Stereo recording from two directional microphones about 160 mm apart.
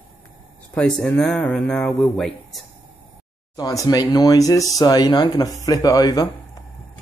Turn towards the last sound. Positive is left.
turn(degrees=25)  # may be behind; listen again after turning